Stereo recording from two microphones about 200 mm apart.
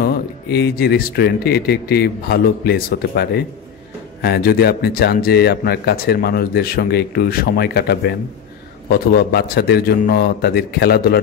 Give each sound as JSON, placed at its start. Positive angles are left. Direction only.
{"t": 0.0, "sound": "speech", "side_deg": 50}